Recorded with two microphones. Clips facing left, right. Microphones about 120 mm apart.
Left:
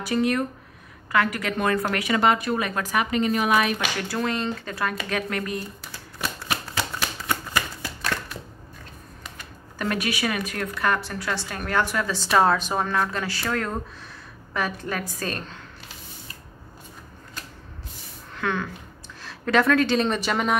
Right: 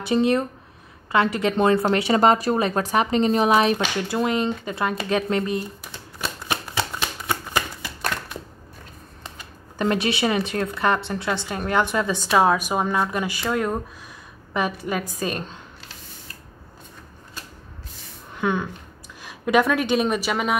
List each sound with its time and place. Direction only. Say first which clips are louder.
0.0 s a woman's voice: right 3 dB; 25° right (ahead or behind)
6.5 s shuffling cards: right 3 dB; 20° right (ahead or behind)
9.8 s a woman's voice: right 4 dB; 25° right (ahead or behind)
12.3 s speech: right 1 dB; 10° right (ahead or behind)
14.8 s speech: right 3 dB; 15° right (ahead or behind)
18.3 s a sound: right 3 dB; 15° right (ahead or behind)
19.2 s speech: right 1 dB; 15° right (ahead or behind)